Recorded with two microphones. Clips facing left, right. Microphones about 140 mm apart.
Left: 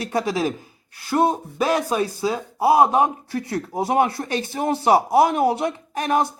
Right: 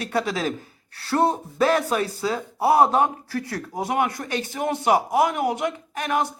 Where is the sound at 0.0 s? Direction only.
20° left (ahead or behind).